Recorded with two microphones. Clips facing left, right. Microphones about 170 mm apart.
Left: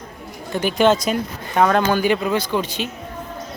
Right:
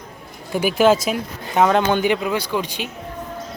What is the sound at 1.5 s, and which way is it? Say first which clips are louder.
Speech: even; 15° right (ahead or behind).